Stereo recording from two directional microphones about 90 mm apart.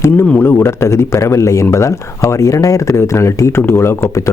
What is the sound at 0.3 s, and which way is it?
Speech, 25° left (ahead or behind).